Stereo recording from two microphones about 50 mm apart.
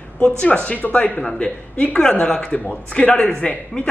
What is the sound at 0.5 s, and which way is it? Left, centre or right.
Speech, left.